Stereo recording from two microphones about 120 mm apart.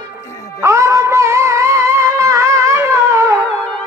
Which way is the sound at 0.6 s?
25° right (ahead or behind).